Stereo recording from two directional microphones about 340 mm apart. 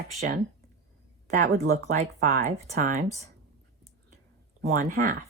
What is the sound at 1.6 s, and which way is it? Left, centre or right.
Speech, right.